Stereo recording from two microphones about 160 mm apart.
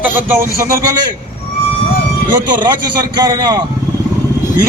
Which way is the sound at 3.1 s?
25° right (ahead or behind).